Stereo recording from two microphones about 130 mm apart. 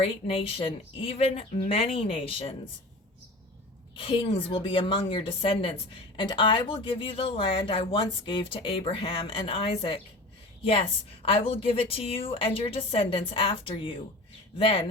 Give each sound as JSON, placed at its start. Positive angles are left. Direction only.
{"t": 0.0, "sound": "a woman's voice", "side_deg": 45}
{"t": 3.9, "sound": "a woman's voice", "side_deg": 40}